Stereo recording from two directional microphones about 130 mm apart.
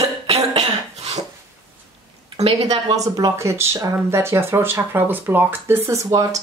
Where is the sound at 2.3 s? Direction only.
55° right (ahead or behind).